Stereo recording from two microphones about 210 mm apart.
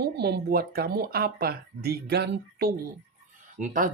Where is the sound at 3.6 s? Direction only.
40° right (ahead or behind).